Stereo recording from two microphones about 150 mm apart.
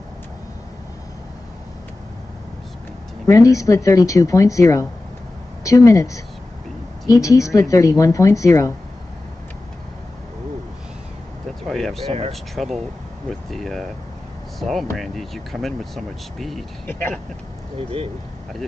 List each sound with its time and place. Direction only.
3.3 s a woman's voice: 20° left (ahead or behind)
11.7 s speech: centre (ahead or behind)
16.8 s speech: 10° left (ahead or behind)